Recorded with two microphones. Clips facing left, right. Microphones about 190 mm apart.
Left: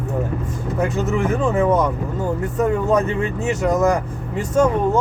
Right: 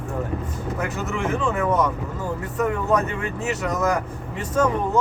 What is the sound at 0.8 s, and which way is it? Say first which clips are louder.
Speech: left 7 dB; 30° left (ahead or behind).